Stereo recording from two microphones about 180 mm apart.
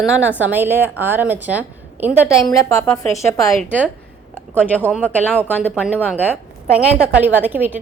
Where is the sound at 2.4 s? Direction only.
20° left (ahead or behind).